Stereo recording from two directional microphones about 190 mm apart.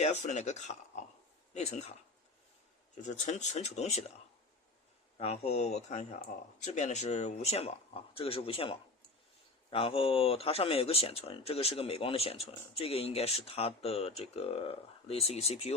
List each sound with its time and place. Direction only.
0.0 s speech: 35° left (ahead or behind)
3.0 s speech: 40° left (ahead or behind)
5.1 s speech: 35° left (ahead or behind)